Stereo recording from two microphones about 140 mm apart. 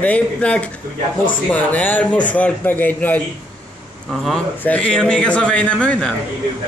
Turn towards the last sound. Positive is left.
turn(degrees=10)  # may be behind; listen again after turning